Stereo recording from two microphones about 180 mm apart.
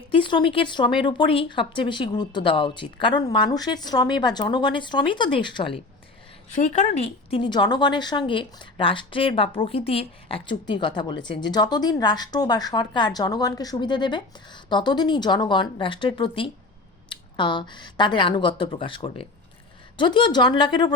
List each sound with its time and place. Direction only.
0.1 s a woman's voice: 25° left (ahead or behind)
6.5 s a woman's voice: 40° left (ahead or behind); by 20.9 s 25° left (ahead or behind)